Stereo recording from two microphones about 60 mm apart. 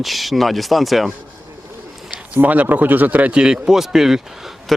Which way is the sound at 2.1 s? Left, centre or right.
Right.